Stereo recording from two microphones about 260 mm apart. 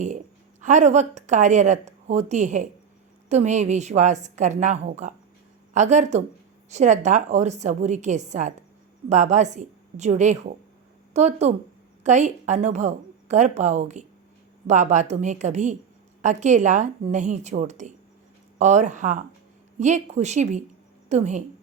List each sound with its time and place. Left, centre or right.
0.6 s speech: right